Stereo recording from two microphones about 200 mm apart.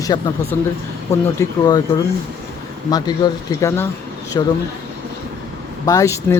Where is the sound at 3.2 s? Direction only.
20° left (ahead or behind).